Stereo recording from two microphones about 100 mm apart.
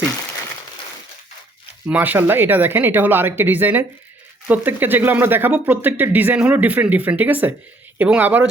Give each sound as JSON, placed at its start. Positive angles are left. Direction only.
{"t": 1.9, "sound": "speech", "side_deg": -20}